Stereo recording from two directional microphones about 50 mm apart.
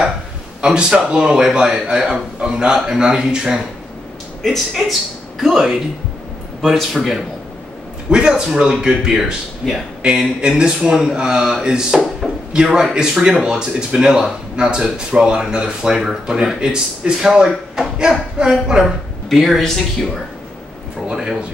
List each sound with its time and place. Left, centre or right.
0.7 s speech: centre
4.4 s speech: centre
8.1 s speech: centre
10.0 s speech: centre
19.2 s speech: centre
21.1 s speech: centre